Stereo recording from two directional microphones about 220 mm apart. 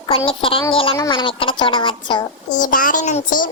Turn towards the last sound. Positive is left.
turn(degrees=40)  # may be behind; listen again after turning